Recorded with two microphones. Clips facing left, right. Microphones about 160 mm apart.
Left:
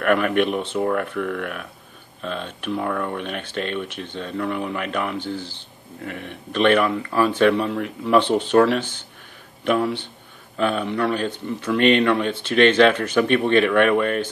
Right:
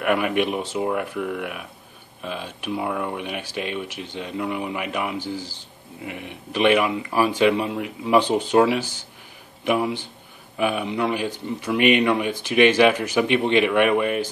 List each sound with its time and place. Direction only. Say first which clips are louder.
0.0 s speech: left 2 dB; 10° right (ahead or behind)